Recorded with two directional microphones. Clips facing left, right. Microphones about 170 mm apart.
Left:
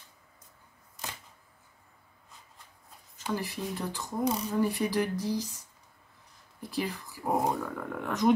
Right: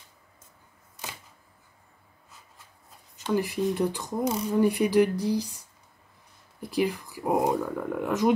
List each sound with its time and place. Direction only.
3.3 s speech: 15° right (ahead or behind)
4.2 s speech: centre (ahead or behind)
4.6 s speech: 15° right (ahead or behind)
6.7 s speech: 15° right (ahead or behind)
7.3 s speech: 5° right (ahead or behind)